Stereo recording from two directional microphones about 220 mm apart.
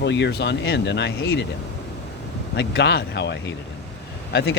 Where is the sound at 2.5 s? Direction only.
50° left (ahead or behind).